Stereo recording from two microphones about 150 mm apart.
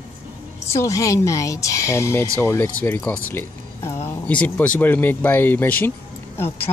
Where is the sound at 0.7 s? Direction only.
20° left (ahead or behind).